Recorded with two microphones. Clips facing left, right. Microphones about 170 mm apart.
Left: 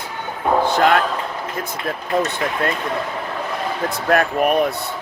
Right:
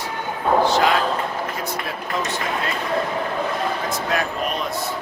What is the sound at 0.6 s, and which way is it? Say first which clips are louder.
Slam: left 4 dB; 55° left (ahead or behind).